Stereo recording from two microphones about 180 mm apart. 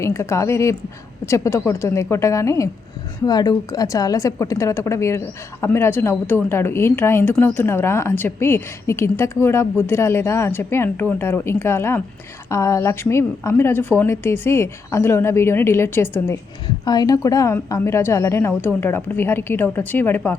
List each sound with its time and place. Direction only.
0.0 s a woman's voice: 15° left (ahead or behind)